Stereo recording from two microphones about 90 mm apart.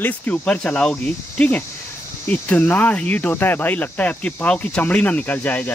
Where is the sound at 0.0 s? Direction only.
15° left (ahead or behind).